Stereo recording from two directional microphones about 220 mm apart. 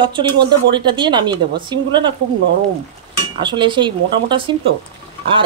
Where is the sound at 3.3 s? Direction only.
20° right (ahead or behind).